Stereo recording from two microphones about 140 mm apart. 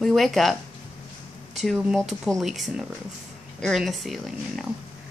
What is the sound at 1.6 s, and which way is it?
Speech, centre (ahead or behind).